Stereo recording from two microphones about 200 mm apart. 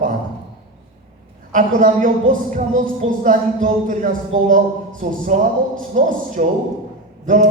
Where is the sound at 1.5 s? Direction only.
40° right (ahead or behind).